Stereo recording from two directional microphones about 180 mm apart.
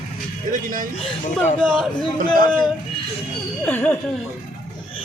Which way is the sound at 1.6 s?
Centre (ahead or behind).